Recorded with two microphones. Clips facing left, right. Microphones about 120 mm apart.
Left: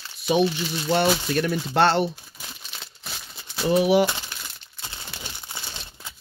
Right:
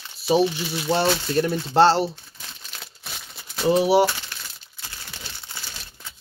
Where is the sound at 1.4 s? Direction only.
25° right (ahead or behind).